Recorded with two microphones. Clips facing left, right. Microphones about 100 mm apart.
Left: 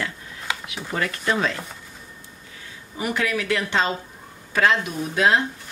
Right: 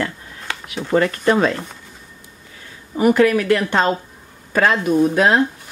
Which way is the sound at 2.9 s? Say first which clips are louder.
Right 11 dB; 50° right (ahead or behind).